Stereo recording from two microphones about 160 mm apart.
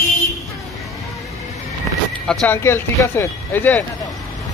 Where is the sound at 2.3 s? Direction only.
10° left (ahead or behind).